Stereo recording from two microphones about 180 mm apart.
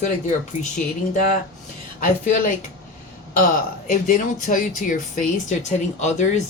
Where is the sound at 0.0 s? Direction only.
40° left (ahead or behind).